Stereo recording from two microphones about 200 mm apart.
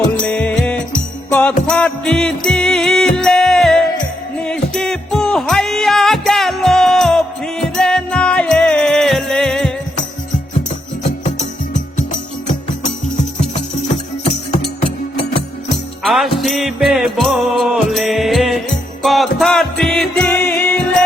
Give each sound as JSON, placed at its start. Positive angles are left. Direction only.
{"t": 0.2, "sound": "music", "side_deg": 5}
{"t": 11.0, "sound": "music", "side_deg": 35}
{"t": 16.0, "sound": "music", "side_deg": 0}